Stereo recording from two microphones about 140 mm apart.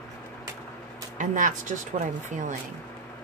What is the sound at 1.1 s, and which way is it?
Speech, 65° right (ahead or behind).